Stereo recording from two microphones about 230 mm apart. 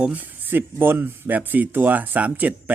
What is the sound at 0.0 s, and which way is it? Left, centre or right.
Speech, centre.